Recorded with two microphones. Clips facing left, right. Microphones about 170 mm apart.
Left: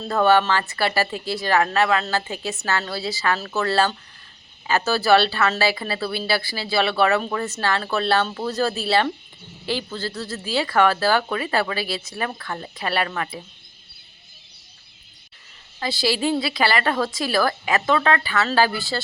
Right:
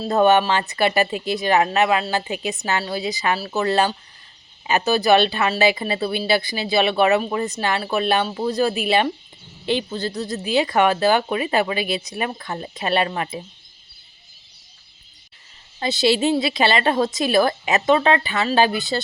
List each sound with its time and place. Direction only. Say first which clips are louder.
0.1 s speech: right 2 dB; 20° right (ahead or behind)
15.8 s speech: right 4 dB; 20° right (ahead or behind)